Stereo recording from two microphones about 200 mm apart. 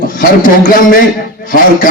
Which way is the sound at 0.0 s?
45° left (ahead or behind).